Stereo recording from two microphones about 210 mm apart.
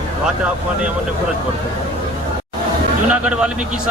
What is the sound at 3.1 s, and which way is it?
Speech, 5° right (ahead or behind).